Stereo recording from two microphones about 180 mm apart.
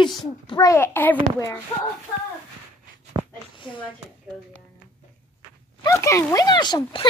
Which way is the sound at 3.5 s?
25° left (ahead or behind).